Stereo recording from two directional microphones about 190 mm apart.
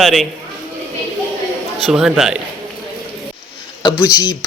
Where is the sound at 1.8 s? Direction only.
Centre (ahead or behind).